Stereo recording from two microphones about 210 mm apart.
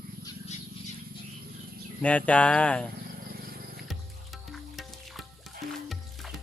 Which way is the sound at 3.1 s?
45° right (ahead or behind).